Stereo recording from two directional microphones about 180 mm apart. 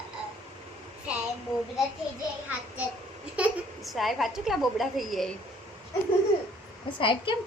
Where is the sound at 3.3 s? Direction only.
5° right (ahead or behind).